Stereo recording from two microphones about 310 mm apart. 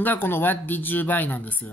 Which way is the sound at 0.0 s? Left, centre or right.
Centre.